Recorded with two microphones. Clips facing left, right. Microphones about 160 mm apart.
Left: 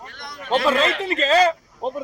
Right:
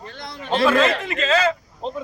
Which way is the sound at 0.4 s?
35° right (ahead or behind).